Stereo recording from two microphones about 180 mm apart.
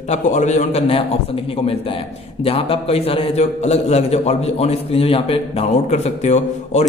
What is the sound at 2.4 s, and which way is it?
A man's voice, 30° left (ahead or behind).